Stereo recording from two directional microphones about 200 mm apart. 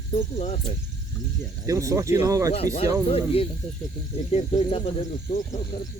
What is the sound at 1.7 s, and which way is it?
Speech, 15° right (ahead or behind).